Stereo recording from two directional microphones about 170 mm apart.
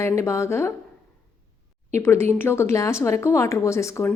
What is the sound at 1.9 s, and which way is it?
Speech, 15° left (ahead or behind).